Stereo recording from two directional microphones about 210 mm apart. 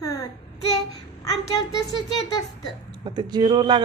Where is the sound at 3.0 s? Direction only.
20° right (ahead or behind).